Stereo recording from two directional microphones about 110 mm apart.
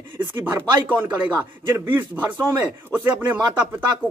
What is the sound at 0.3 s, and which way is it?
Speech, 20° right (ahead or behind).